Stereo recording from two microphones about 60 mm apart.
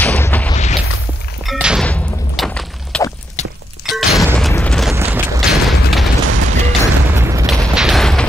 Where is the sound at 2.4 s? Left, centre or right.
Centre.